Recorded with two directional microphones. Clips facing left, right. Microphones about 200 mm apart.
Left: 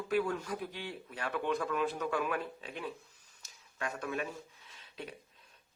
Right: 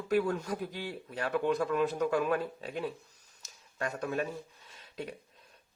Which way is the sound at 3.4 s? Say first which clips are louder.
Right 4 dB; 35° right (ahead or behind).